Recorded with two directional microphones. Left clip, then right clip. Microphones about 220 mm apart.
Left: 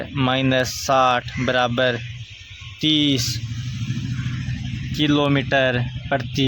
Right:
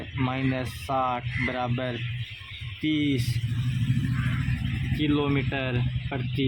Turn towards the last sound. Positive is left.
turn(degrees=50)  # may be behind; listen again after turning